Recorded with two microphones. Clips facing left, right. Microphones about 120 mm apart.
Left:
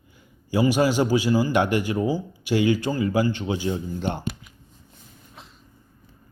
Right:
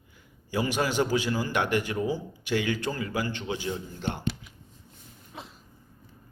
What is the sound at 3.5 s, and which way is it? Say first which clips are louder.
Speech: left 6 dB; 15° left (ahead or behind).